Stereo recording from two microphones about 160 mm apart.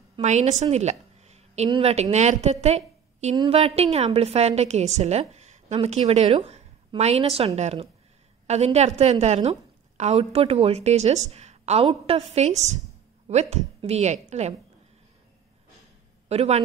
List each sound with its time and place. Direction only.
0.2 s a woman's voice: 45° right (ahead or behind)
11.9 s a woman's voice: 25° right (ahead or behind)
12.4 s a woman's voice: 45° right (ahead or behind)
16.3 s speech: 40° right (ahead or behind)